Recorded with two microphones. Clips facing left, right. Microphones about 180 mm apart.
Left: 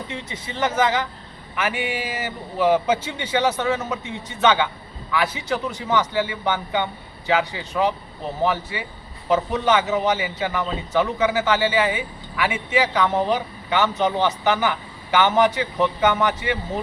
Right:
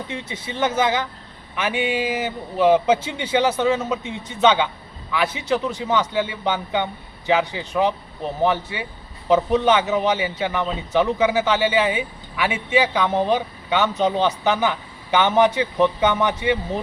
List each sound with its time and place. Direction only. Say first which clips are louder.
0.3 s a man's voice: right 1 dB; 15° right (ahead or behind)